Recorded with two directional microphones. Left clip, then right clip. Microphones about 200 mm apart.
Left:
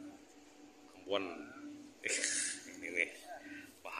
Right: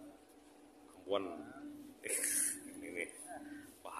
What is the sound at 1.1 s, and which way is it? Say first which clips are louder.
Speech: even; 5° right (ahead or behind).